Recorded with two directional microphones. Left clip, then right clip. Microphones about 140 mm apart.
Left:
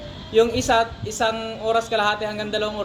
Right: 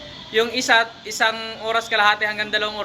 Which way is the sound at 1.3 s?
10° left (ahead or behind).